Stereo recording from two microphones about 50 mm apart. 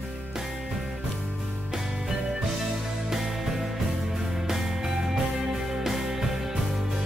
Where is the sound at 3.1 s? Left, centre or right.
Centre.